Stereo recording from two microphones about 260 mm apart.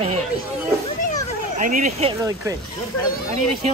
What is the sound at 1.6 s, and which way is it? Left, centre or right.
Speech, right.